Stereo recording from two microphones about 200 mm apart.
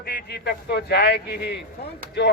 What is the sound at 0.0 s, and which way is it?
A man's voice, 55° left (ahead or behind).